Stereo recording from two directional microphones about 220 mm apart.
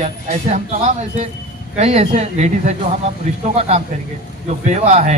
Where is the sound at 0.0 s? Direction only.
30° right (ahead or behind).